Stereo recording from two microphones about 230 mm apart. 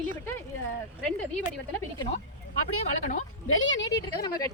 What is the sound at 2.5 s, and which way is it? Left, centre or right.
Speech, left.